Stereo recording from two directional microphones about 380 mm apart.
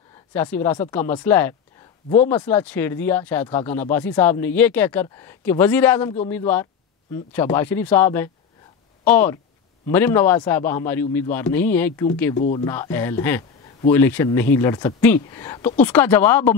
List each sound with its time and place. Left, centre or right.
0.3 s a man's voice: centre
12.4 s speech: centre
12.6 s a man's voice: centre